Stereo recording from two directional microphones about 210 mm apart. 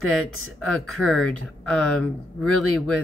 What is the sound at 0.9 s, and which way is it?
Speech, 5° left (ahead or behind).